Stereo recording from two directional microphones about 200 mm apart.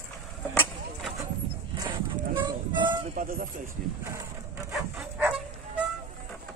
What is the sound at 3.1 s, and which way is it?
Speech, 45° right (ahead or behind).